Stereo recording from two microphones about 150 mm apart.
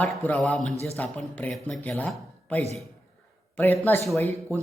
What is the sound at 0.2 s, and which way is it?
A man's voice, 10° left (ahead or behind).